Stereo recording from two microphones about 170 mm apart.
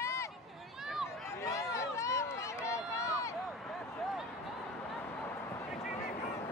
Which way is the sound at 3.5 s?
Centre (ahead or behind).